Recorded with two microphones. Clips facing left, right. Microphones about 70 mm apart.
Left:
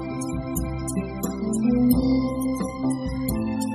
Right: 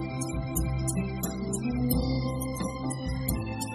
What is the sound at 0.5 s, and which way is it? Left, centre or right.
Music, left.